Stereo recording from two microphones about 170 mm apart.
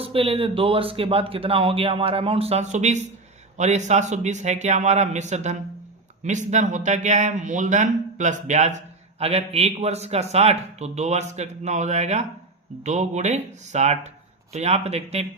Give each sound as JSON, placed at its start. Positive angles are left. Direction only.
{"t": 0.0, "sound": "speech", "side_deg": -35}